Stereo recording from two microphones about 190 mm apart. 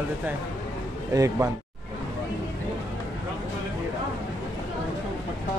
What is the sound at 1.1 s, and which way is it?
Speech, 20° right (ahead or behind).